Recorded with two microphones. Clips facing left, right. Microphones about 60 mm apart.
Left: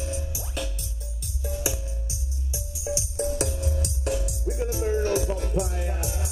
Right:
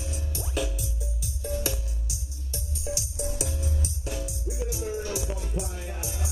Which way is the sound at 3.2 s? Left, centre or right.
Left.